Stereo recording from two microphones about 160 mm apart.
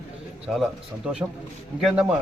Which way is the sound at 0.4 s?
5° right (ahead or behind).